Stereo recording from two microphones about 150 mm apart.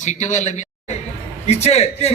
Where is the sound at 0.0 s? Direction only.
50° left (ahead or behind).